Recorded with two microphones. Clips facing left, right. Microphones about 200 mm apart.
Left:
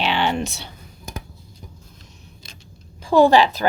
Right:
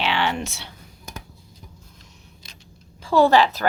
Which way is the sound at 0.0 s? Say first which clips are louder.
Left 2 dB; 20° left (ahead or behind).